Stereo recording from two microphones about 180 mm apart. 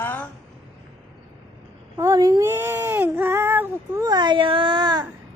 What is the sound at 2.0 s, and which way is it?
Speech, 20° right (ahead or behind).